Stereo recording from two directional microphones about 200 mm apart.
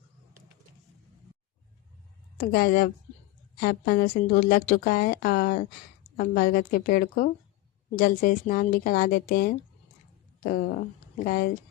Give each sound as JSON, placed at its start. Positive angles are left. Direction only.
{"t": 2.4, "sound": "a woman's voice", "side_deg": 45}